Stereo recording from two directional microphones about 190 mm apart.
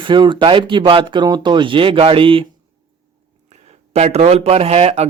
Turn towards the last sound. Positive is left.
turn(degrees=-35)  # may be behind; listen again after turning